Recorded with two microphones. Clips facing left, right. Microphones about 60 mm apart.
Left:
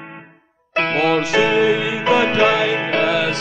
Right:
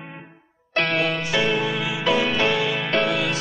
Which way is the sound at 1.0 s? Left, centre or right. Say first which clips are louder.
Left 7 dB; left.